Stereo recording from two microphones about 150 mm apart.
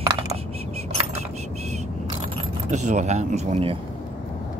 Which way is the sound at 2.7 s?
55° right (ahead or behind).